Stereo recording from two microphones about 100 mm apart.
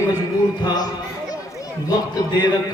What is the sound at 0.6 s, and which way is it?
Speech, 40° left (ahead or behind).